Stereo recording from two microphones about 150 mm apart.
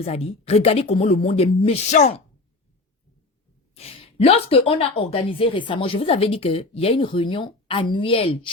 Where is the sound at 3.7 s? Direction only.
40° left (ahead or behind).